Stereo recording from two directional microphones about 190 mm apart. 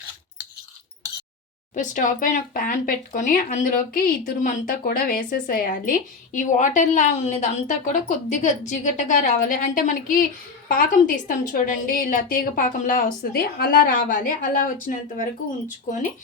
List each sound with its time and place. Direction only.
1.7 s a woman's voice: 40° left (ahead or behind)